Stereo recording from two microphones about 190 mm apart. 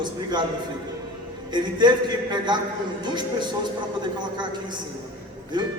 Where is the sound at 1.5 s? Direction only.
25° right (ahead or behind).